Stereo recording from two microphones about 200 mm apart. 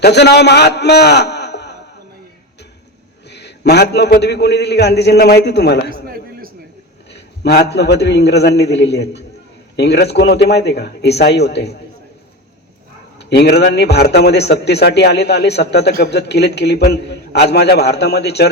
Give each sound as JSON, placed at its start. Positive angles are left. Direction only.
{"t": 0.0, "sound": "a man's voice", "side_deg": 55}
{"t": 3.2, "sound": "a man's voice", "side_deg": 60}
{"t": 5.9, "sound": "a sound", "side_deg": -45}
{"t": 7.1, "sound": "a man's voice", "side_deg": 55}
{"t": 13.1, "sound": "a man's voice", "side_deg": 55}